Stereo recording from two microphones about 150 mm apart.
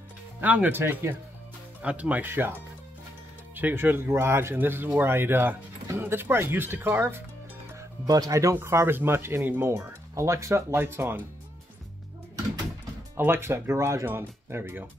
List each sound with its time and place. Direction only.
0.4 s speech: 10° right (ahead or behind)
3.5 s speech: 15° right (ahead or behind)
13.1 s speech: 15° right (ahead or behind)